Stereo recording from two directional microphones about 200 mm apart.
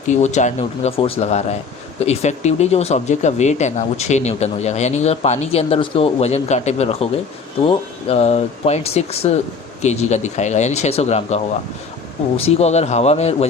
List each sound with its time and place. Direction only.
0.1 s speech: 35° left (ahead or behind)
12.4 s speech: 30° left (ahead or behind)